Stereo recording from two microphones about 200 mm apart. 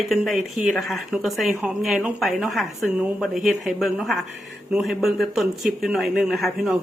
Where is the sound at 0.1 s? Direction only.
Centre (ahead or behind).